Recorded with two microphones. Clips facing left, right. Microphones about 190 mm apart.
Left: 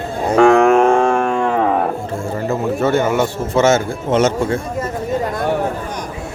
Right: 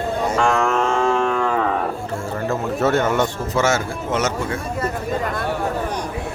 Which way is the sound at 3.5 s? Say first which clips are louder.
Left 7 dB; 25° left (ahead or behind).